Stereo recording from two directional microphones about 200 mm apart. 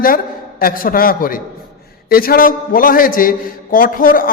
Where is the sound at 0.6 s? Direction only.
45° left (ahead or behind).